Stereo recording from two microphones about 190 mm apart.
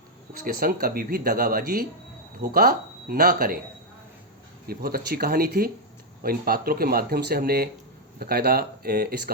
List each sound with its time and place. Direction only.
0.3 s speech: 50° right (ahead or behind)
4.6 s speech: 55° right (ahead or behind)